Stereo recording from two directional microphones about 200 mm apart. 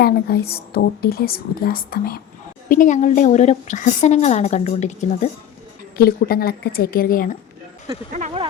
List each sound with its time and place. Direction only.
0.0 s a woman's voice: 50° left (ahead or behind); by 5.3 s 35° left (ahead or behind)
6.0 s speech: 50° left (ahead or behind)
8.1 s a sound: 30° right (ahead or behind)